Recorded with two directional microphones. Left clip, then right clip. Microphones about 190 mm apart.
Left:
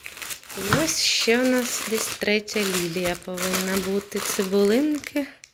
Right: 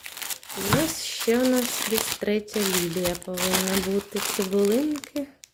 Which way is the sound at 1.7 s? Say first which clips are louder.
Even; 45° right (ahead or behind).